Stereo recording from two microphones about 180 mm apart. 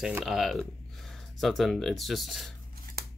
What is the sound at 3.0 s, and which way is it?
Scissors, 55° right (ahead or behind).